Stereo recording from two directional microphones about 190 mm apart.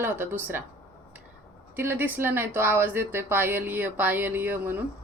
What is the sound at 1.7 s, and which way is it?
Speech, 10° right (ahead or behind).